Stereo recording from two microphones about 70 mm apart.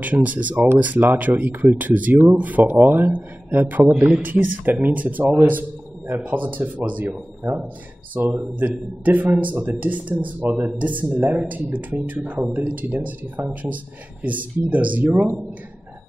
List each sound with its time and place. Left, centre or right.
0.0 s a man's voice: right